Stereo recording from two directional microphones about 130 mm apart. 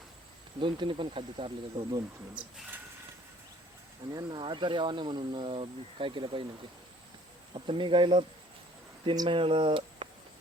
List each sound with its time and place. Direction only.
0.6 s speech: 40° right (ahead or behind)
2.3 s speech: 10° right (ahead or behind)
4.1 s speech: 30° right (ahead or behind)
7.5 s speech: 40° right (ahead or behind)